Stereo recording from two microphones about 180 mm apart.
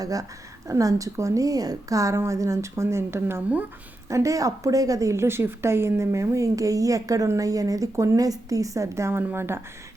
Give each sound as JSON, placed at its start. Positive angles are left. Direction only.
{"t": 0.0, "sound": "a woman's voice", "side_deg": -20}